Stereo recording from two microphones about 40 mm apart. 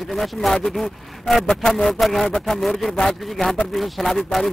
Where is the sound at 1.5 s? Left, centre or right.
Centre.